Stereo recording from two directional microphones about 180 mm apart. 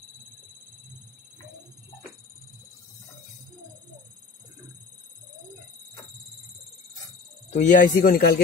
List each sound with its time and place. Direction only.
7.5 s a man's voice: 45° left (ahead or behind)